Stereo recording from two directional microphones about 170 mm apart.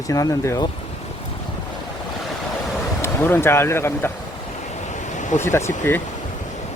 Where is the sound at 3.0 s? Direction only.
15° left (ahead or behind).